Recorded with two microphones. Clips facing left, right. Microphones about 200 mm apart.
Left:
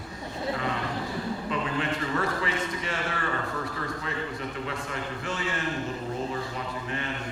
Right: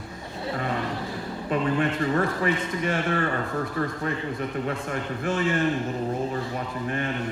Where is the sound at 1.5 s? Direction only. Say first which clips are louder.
Right 8 dB; 50° right (ahead or behind).